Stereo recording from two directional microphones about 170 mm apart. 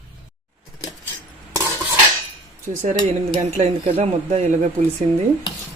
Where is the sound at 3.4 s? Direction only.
40° right (ahead or behind).